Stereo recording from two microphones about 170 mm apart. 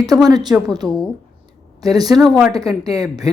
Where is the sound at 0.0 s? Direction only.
20° right (ahead or behind).